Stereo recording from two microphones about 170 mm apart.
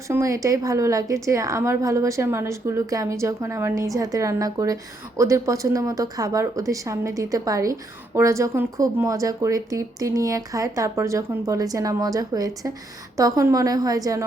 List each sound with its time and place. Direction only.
0.1 s a woman's voice: 15° right (ahead or behind)